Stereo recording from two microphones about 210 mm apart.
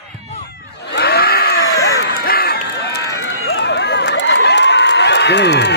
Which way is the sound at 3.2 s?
55° left (ahead or behind).